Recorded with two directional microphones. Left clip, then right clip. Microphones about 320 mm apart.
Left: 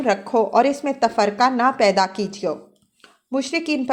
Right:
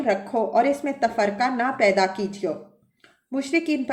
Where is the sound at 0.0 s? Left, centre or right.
Left.